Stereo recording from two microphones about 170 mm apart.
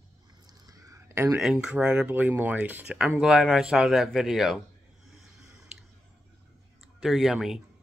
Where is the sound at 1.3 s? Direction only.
5° right (ahead or behind).